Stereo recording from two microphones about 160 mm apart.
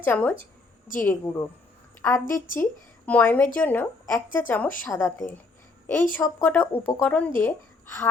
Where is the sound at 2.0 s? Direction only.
5° left (ahead or behind).